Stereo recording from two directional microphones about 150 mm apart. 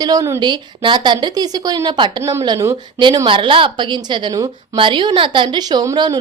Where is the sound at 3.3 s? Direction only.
35° right (ahead or behind).